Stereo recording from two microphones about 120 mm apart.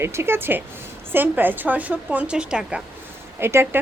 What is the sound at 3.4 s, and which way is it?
Speech, 20° right (ahead or behind).